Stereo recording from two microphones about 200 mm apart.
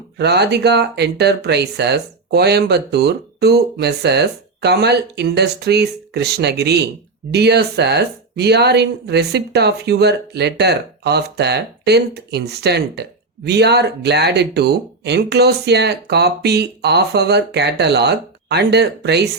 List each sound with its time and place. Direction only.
0.2 s speech: 55° right (ahead or behind)